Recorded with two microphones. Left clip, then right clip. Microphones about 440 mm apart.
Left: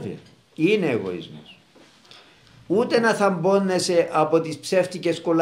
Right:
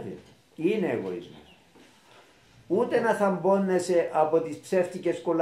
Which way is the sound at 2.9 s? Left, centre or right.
Left.